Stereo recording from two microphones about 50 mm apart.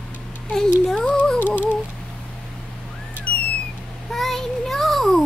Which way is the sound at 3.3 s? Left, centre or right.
Left.